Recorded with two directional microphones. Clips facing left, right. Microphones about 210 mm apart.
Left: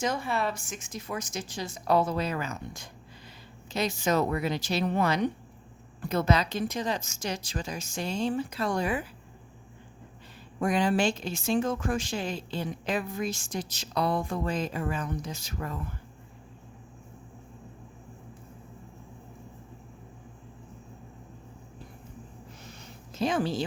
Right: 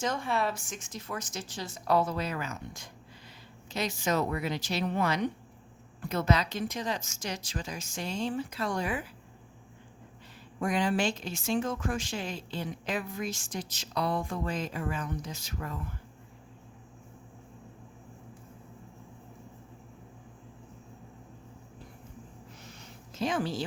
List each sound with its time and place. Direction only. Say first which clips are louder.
0.0 s a woman's voice: left 1 dB; 5° left (ahead or behind); by 9.0 s 30° left (ahead or behind)
10.6 s speech: left 3 dB; 35° left (ahead or behind)
23.1 s a woman's voice: left 3 dB; 30° left (ahead or behind)